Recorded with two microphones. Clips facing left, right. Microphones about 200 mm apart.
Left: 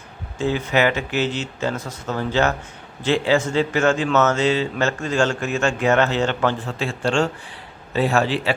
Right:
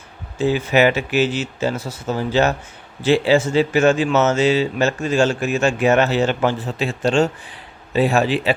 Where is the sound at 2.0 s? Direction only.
10° right (ahead or behind).